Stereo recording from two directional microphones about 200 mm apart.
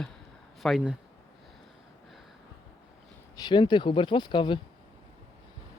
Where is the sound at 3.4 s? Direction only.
20° left (ahead or behind).